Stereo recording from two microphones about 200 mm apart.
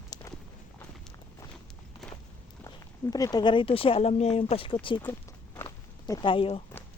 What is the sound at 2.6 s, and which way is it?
Speech, 20° left (ahead or behind).